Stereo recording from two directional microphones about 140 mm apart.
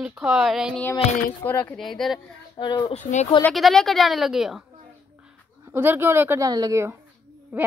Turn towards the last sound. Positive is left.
turn(degrees=-15)  # may be behind; listen again after turning